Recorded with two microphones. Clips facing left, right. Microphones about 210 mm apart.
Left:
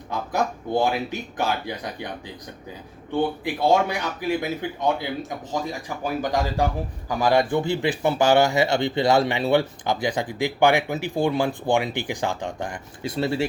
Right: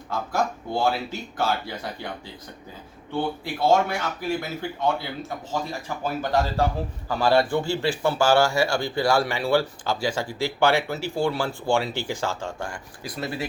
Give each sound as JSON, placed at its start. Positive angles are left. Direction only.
{"t": 0.1, "sound": "speech", "side_deg": 20}
{"t": 3.4, "sound": "speech", "side_deg": 15}